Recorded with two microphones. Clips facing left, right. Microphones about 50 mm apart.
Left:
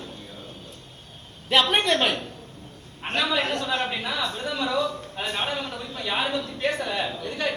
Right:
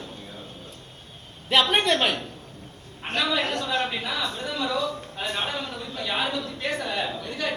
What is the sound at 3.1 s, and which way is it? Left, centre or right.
A man's voice, left.